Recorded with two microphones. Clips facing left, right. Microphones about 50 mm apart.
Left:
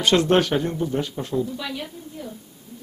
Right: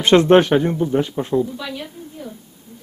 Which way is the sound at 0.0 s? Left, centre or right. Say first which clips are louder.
Right 6 dB; right.